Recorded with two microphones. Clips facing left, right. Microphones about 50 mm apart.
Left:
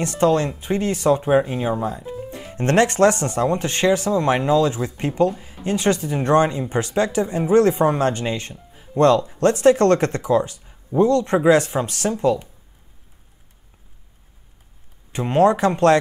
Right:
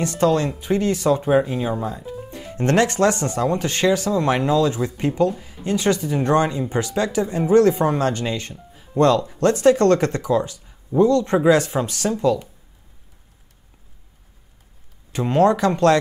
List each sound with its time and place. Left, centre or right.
0.0 s speech: left; by 2.0 s centre
2.5 s speech: left
7.2 s speech: centre
10.6 s a sound: centre
11.0 s speech: left
15.1 s speech: left